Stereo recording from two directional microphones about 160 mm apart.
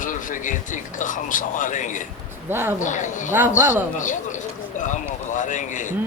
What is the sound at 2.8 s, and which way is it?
Speech, 50° left (ahead or behind).